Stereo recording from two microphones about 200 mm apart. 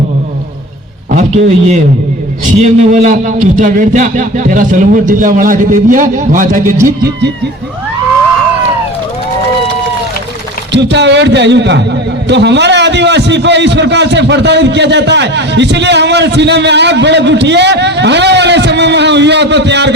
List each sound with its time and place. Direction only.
1.1 s a man's voice: 35° right (ahead or behind)
2.9 s speech: 40° right (ahead or behind)
10.7 s a man's voice: 60° right (ahead or behind)